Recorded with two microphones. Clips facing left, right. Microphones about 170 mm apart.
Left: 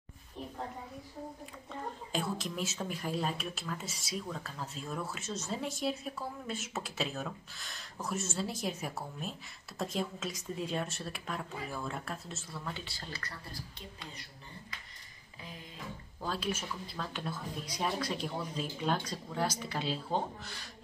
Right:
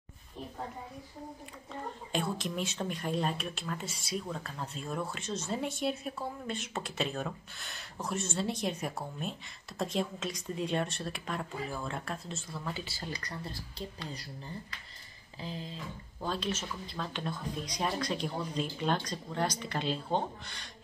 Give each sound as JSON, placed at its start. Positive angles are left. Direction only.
{"t": 2.1, "sound": "speech", "side_deg": 0}
{"t": 13.1, "sound": "speech", "side_deg": -20}
{"t": 15.4, "sound": "speech", "side_deg": -30}
{"t": 16.2, "sound": "speech", "side_deg": 5}